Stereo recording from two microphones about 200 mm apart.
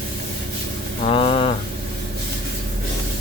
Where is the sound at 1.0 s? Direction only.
30° left (ahead or behind).